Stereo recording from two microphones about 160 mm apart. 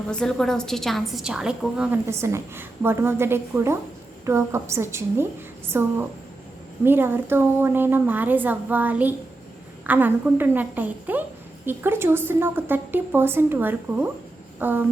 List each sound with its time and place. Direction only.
0.1 s a woman's voice: 5° left (ahead or behind)
2.0 s a woman's voice: 15° right (ahead or behind)